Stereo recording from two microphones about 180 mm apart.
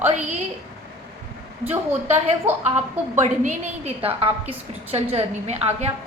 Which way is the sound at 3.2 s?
40° right (ahead or behind).